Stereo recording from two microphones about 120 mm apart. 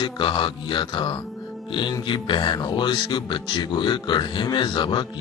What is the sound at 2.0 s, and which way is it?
Speech, 40° left (ahead or behind).